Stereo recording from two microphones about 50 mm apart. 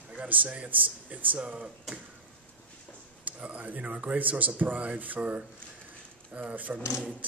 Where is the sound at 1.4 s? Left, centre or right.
Centre.